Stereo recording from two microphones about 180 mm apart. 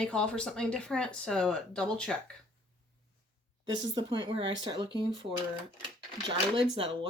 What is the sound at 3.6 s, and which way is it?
Speech, 25° right (ahead or behind).